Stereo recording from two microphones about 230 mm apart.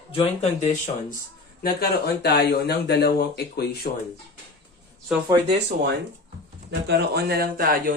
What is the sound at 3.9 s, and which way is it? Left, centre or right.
Speech, left.